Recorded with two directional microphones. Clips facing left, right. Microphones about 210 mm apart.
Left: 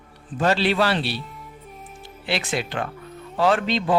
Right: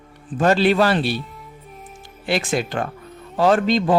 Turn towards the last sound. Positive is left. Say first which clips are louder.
# right 4 dB
turn(degrees=-40)  # may be behind; listen again after turning